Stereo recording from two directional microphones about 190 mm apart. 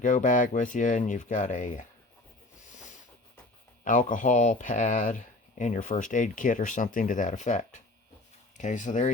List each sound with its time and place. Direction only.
0.0 s speech: 45° left (ahead or behind)
3.8 s speech: 45° left (ahead or behind)